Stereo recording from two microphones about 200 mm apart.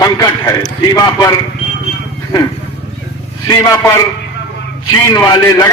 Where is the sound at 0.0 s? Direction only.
20° left (ahead or behind).